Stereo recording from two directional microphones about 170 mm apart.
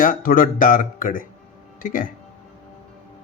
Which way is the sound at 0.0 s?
55° left (ahead or behind).